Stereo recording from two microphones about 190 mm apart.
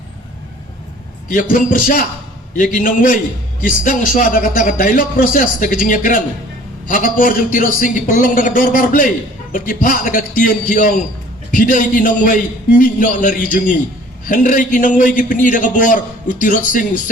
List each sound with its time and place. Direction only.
1.3 s speech: 45° left (ahead or behind)